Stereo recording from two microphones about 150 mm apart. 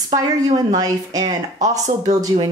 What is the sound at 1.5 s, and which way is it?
Speech, 55° right (ahead or behind).